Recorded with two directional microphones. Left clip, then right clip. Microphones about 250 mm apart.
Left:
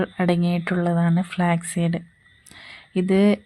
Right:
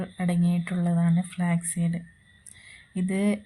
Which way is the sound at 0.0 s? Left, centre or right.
Left.